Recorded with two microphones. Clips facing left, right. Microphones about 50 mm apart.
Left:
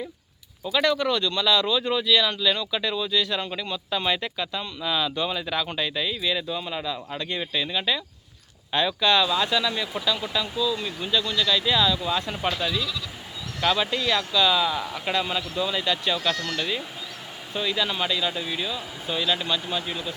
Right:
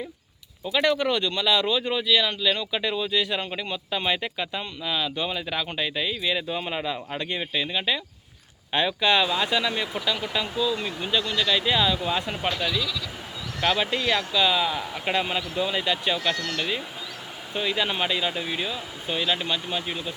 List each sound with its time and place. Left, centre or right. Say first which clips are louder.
0.7 s speech: even; centre
4.8 s speech: left 2 dB; centre
6.6 s speech: right 1 dB; right
7.1 s speech: even; centre
15.0 s speech: right 2 dB; centre